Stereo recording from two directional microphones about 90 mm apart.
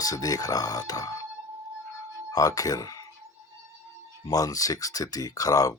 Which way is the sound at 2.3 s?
40° left (ahead or behind).